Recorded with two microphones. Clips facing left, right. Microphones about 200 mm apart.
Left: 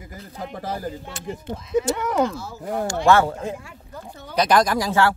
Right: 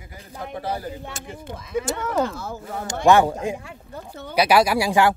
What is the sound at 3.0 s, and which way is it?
Speech, 15° right (ahead or behind).